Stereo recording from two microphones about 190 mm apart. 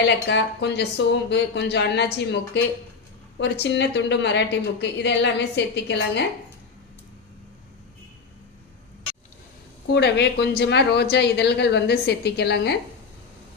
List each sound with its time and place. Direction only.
0.0 s a woman's voice: 65° left (ahead or behind)
9.9 s a woman's voice: 60° left (ahead or behind)